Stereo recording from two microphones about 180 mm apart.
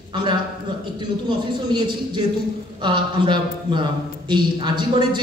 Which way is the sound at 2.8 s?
25° right (ahead or behind).